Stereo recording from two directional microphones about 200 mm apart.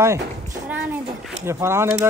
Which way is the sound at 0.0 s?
15° right (ahead or behind).